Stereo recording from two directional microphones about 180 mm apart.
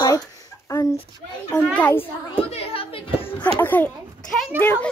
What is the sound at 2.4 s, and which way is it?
Speech, 30° left (ahead or behind).